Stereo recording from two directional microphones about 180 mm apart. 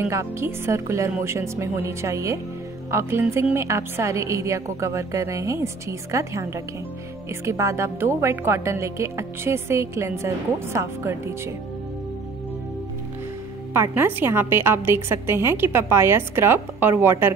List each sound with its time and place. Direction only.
0.0 s a woman's voice: 15° right (ahead or behind)
13.7 s a woman's voice: 10° right (ahead or behind)